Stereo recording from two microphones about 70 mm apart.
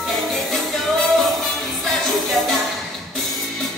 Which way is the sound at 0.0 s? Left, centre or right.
Centre.